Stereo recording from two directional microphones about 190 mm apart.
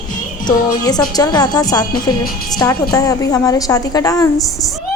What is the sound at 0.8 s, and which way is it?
A woman's voice, 20° left (ahead or behind).